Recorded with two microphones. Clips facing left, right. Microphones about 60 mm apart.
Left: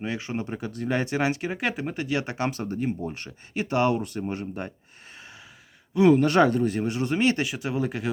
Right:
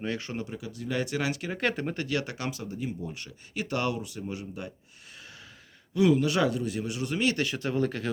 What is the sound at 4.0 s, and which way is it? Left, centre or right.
Speech, left.